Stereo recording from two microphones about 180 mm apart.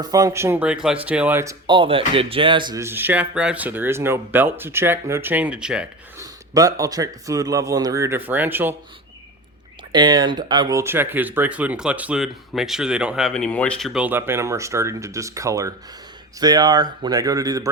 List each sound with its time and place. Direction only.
0.0 s speech: 20° right (ahead or behind)
2.8 s speech: 10° right (ahead or behind)
6.1 s speech: 20° right (ahead or behind)
9.9 s speech: 25° right (ahead or behind)